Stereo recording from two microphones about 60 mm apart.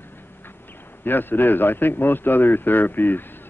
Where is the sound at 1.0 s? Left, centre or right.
Left.